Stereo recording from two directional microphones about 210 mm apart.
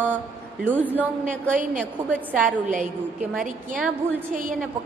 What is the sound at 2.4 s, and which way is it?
Speech, 40° right (ahead or behind).